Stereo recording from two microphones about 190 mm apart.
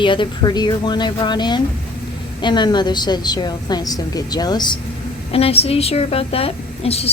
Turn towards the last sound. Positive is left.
turn(degrees=30)  # may be behind; listen again after turning